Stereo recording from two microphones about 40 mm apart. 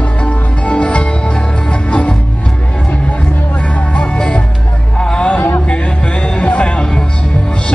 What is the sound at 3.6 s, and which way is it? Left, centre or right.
Music, left.